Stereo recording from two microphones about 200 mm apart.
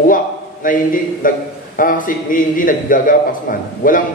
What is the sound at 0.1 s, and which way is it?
A man's voice, 45° left (ahead or behind).